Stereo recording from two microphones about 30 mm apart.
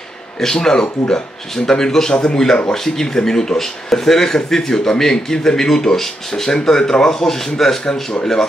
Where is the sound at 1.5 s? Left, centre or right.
Centre.